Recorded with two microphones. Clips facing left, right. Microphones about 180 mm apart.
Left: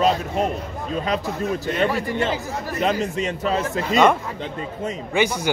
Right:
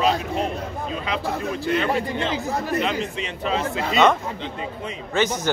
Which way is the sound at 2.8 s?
45° left (ahead or behind).